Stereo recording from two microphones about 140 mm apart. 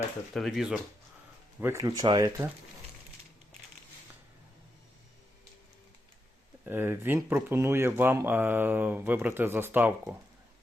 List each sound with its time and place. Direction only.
0.3 s speech: centre (ahead or behind)
1.6 s speech: 20° right (ahead or behind)
6.7 s speech: 15° right (ahead or behind)